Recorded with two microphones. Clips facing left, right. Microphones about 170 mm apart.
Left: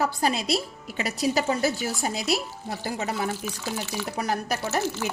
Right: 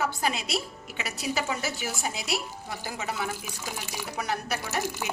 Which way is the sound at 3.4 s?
10° right (ahead or behind).